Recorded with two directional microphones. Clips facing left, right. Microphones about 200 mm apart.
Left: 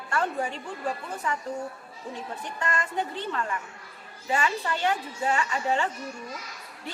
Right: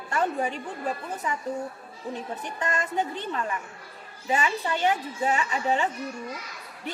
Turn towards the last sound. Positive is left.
turn(degrees=-20)  # may be behind; listen again after turning